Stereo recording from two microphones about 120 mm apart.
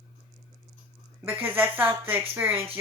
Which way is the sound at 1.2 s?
15° right (ahead or behind).